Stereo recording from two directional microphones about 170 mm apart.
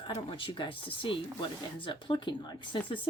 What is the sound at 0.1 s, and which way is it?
Speech, 30° left (ahead or behind).